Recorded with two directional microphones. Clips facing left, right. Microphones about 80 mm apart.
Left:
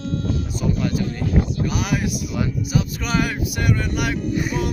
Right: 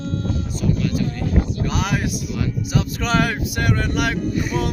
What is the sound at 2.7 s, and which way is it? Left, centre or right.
Speech, right.